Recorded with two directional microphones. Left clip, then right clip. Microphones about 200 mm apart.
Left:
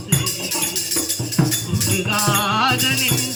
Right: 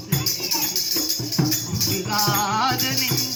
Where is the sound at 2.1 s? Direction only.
15° right (ahead or behind).